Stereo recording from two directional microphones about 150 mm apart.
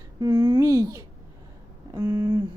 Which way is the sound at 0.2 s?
25° right (ahead or behind).